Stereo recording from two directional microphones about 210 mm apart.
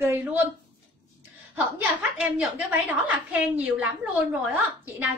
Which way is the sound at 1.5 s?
5° right (ahead or behind).